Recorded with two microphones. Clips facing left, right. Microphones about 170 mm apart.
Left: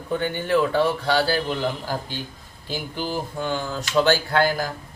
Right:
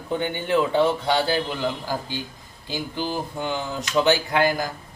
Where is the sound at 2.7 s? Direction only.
15° right (ahead or behind).